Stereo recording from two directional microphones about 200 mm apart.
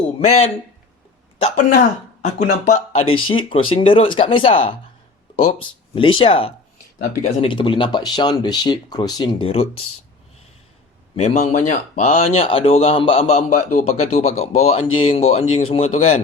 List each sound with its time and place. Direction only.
1.4 s speech: 30° left (ahead or behind)
11.2 s speech: 35° left (ahead or behind)